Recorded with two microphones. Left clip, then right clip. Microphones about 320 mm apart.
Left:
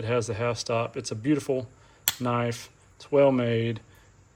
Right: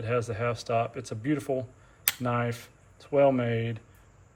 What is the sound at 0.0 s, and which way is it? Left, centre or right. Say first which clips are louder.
Speech: left 2 dB; centre.